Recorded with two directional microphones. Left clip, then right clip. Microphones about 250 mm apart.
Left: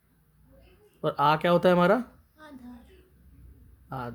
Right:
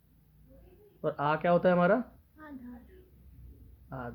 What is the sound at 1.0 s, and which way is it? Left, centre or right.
A woman's voice, left.